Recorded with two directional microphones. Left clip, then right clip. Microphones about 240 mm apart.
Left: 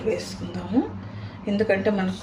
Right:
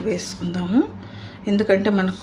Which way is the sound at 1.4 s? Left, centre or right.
Right.